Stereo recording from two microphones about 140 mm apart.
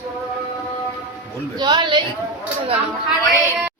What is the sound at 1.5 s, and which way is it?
Speech, 30° right (ahead or behind).